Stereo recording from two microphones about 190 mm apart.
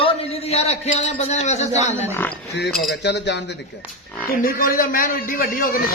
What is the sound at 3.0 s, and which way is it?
Speech, 65° left (ahead or behind).